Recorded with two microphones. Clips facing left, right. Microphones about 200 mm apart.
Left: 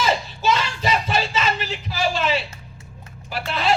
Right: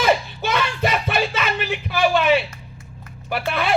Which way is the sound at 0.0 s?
60° right (ahead or behind).